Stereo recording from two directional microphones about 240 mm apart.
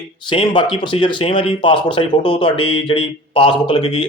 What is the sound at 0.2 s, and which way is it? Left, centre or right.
Speech, centre.